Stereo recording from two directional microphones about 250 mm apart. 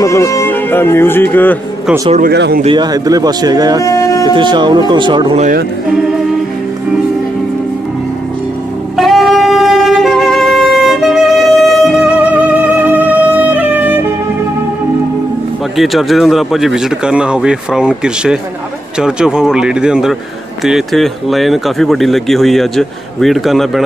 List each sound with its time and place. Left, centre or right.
0.0 s speech: centre
2.0 s speech: right
2.3 s speech: right
2.6 s speech: centre
3.8 s a sound: centre
4.3 s speech: centre
8.9 s music: centre
15.7 s speech: centre